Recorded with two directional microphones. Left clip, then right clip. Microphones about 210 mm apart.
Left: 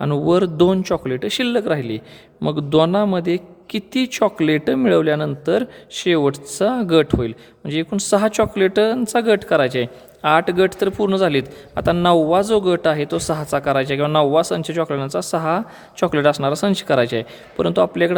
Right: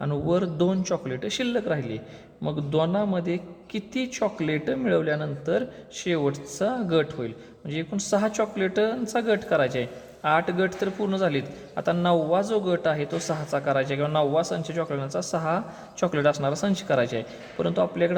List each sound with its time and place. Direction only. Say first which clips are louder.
0.0 s a man's voice: left 8 dB; 45° left (ahead or behind)